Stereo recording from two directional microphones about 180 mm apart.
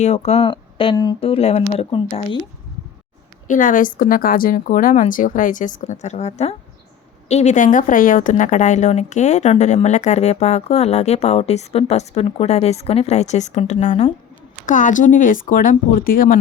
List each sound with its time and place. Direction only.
0.0 s speech: 40° left (ahead or behind)
3.4 s speech: 45° left (ahead or behind)